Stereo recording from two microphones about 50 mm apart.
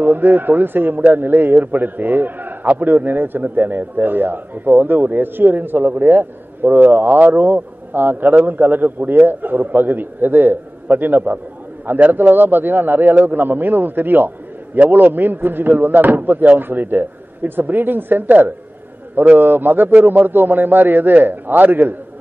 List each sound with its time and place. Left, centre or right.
0.0 s a man's voice: right